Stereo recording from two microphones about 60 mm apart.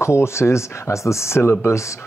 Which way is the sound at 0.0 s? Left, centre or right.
Left.